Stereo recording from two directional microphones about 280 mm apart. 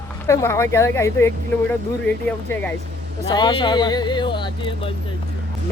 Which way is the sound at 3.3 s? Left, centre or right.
Centre.